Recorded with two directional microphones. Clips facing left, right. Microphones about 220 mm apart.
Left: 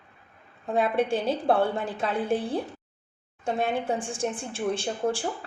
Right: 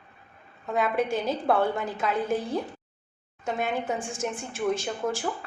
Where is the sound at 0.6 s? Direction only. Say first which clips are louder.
Left 1 dB; 30° left (ahead or behind).